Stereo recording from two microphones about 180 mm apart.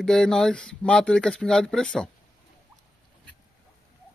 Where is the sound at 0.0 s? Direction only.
5° left (ahead or behind).